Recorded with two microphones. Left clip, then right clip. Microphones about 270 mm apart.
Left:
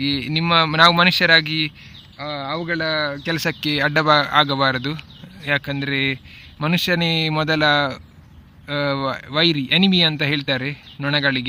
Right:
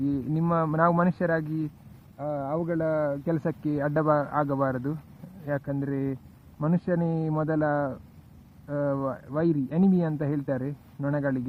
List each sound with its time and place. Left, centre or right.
0.0 s speech: left
2.1 s speech: centre